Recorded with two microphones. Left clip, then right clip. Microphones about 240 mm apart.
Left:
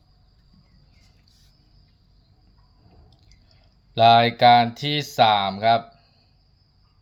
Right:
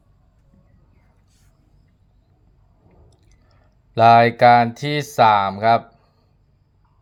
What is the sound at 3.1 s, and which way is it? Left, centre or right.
Drip, centre.